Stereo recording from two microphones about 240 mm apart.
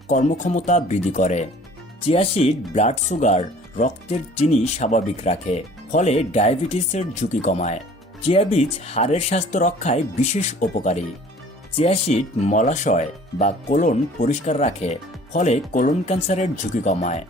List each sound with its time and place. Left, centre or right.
0.1 s speech: left